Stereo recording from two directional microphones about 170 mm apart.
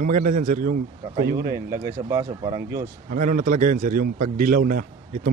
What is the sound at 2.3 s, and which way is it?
Speech, 30° right (ahead or behind).